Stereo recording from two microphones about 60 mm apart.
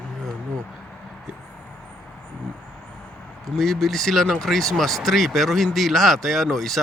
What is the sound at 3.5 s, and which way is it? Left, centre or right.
Speech, centre.